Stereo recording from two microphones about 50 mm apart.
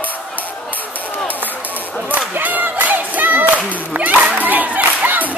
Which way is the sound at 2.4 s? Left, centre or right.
Right.